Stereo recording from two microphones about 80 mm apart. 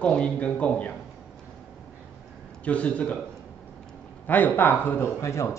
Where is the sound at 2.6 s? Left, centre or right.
Centre.